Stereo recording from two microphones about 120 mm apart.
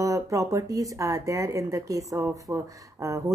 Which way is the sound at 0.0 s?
25° right (ahead or behind).